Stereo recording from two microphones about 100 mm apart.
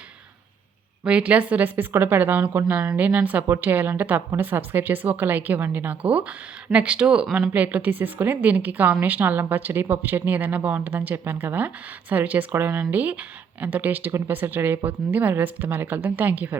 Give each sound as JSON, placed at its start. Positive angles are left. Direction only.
{"t": 1.0, "sound": "a woman's voice", "side_deg": -10}